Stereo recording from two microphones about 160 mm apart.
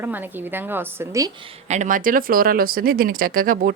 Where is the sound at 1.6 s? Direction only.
50° right (ahead or behind).